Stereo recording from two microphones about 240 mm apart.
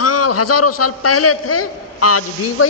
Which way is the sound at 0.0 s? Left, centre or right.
Left.